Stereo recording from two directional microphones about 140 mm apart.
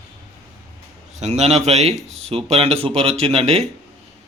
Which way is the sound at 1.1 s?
55° right (ahead or behind).